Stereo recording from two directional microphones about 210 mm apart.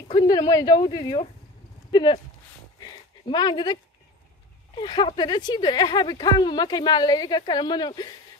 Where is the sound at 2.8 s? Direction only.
20° left (ahead or behind).